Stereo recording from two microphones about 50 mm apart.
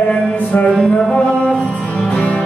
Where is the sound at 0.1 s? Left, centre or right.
Left.